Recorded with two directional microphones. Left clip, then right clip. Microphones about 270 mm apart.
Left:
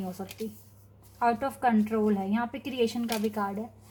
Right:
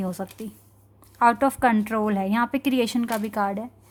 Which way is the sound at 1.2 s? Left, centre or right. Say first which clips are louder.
Right 7 dB; right.